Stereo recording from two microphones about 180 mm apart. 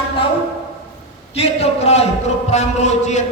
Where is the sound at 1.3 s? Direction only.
35° left (ahead or behind).